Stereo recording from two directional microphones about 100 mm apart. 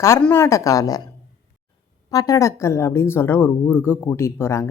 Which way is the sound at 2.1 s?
35° left (ahead or behind).